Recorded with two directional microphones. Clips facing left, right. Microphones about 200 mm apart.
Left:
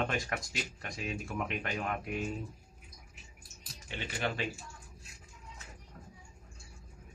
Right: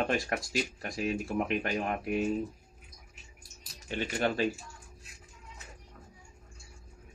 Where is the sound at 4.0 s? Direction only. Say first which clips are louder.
Right 6 dB; 40° right (ahead or behind).